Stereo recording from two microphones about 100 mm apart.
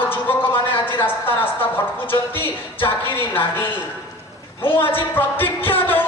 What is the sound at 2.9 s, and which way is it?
Speech, 20° left (ahead or behind).